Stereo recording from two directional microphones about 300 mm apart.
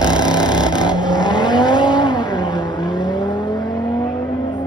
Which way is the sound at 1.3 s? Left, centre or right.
Centre.